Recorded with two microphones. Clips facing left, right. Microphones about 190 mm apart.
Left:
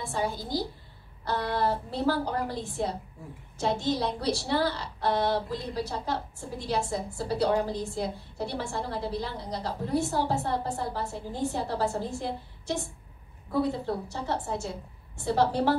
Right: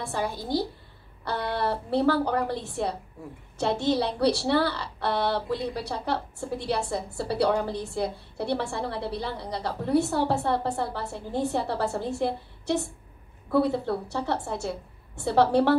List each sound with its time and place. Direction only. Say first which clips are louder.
0.0 s a woman's voice: right 1 dB; 60° right (ahead or behind)